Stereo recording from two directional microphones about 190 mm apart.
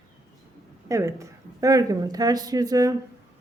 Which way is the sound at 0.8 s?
15° right (ahead or behind).